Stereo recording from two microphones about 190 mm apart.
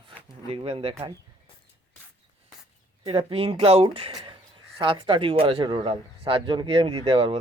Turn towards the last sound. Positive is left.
turn(degrees=-30)  # may be behind; listen again after turning